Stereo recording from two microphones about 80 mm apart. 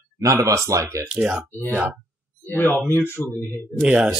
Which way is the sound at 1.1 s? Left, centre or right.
Centre.